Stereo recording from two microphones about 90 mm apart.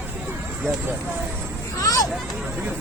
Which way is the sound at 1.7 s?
40° left (ahead or behind).